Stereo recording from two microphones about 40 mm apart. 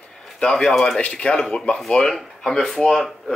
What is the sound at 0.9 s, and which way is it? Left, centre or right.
Speech, left.